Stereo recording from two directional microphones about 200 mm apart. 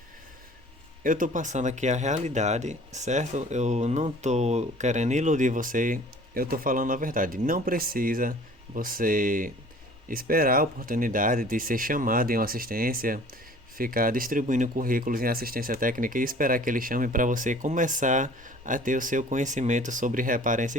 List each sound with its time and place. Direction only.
1.0 s speech: 40° right (ahead or behind)